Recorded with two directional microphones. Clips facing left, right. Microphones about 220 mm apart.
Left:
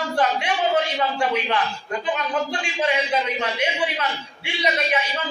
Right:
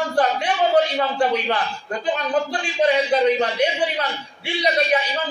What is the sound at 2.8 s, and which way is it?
A man's voice, 35° right (ahead or behind).